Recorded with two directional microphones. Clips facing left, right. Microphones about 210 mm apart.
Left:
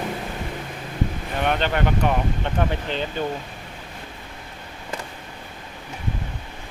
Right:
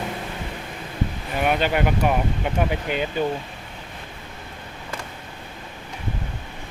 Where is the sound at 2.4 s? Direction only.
10° right (ahead or behind).